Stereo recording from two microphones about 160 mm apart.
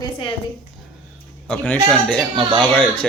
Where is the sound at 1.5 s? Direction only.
10° left (ahead or behind).